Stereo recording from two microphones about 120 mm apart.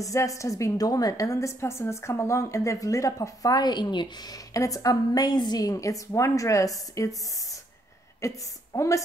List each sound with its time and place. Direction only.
0.0 s a woman's voice: 25° left (ahead or behind)